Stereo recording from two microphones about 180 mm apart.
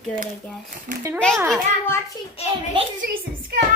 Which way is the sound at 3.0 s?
50° right (ahead or behind).